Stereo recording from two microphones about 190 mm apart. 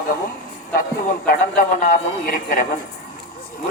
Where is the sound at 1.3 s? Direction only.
45° left (ahead or behind).